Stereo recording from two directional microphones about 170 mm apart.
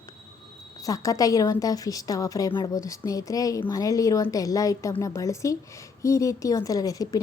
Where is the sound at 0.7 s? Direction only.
20° left (ahead or behind).